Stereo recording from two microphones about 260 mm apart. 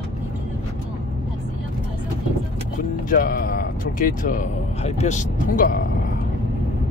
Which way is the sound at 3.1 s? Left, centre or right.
Left.